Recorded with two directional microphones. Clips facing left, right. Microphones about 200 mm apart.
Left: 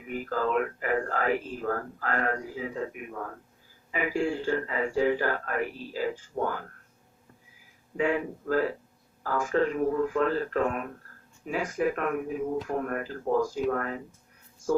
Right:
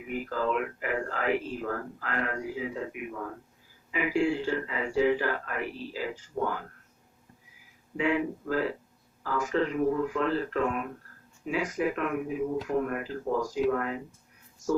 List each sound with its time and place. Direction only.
0.1 s speech: 40° left (ahead or behind)
7.9 s speech: 45° left (ahead or behind)